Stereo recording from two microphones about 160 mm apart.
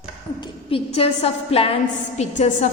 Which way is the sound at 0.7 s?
40° left (ahead or behind).